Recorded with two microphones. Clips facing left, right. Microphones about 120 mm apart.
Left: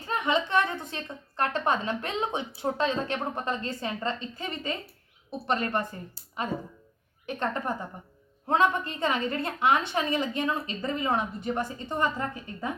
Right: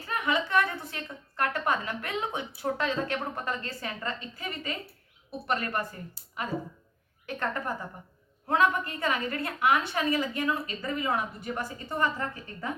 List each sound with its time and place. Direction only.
0.0 s a woman's voice: 25° left (ahead or behind)